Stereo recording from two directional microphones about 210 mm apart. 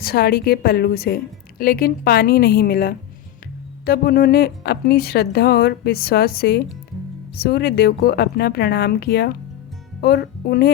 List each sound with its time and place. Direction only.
0.0 s a woman's voice: 45° left (ahead or behind)